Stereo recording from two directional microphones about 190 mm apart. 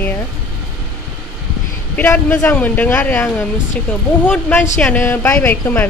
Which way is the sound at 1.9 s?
10° left (ahead or behind).